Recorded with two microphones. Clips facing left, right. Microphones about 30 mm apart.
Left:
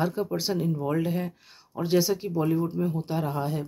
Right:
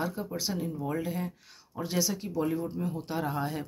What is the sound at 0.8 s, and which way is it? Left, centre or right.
Speech, left.